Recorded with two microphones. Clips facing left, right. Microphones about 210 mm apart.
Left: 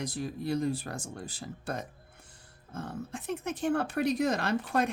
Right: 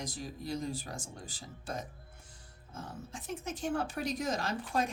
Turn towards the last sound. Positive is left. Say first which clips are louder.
# left 5 dB
turn(degrees=65)  # may be behind; listen again after turning